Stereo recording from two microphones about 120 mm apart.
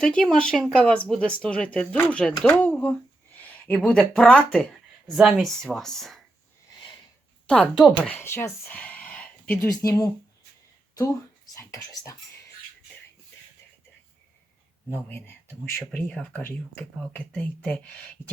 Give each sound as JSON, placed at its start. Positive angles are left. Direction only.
{"t": 0.0, "sound": "speech", "side_deg": 10}
{"t": 7.4, "sound": "speech", "side_deg": 5}
{"t": 9.6, "sound": "speech", "side_deg": 30}
{"t": 14.8, "sound": "speech", "side_deg": 15}